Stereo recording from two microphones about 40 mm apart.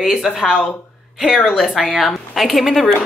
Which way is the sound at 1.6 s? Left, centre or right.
Centre.